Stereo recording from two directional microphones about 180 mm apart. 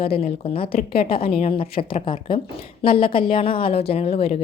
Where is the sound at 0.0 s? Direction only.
35° left (ahead or behind).